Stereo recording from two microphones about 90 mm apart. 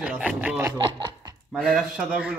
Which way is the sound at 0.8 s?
60° right (ahead or behind).